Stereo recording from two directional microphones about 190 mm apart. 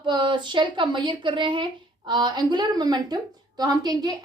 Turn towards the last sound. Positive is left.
turn(degrees=-20)  # may be behind; listen again after turning